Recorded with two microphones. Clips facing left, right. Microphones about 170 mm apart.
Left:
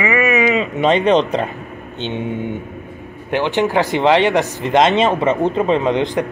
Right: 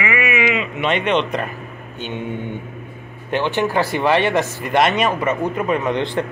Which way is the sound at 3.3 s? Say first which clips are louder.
Left 2 dB; 15° left (ahead or behind).